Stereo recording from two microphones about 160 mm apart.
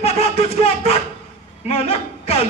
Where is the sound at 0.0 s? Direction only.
40° left (ahead or behind).